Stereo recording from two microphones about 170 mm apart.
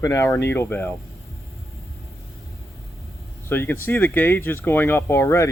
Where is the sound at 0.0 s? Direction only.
20° left (ahead or behind).